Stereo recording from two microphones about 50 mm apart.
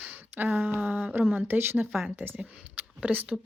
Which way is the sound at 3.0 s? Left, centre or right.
Right.